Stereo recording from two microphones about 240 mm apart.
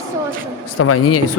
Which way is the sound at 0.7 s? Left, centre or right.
Left.